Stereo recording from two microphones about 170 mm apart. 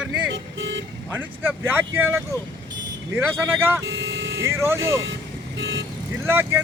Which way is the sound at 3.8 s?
90° right.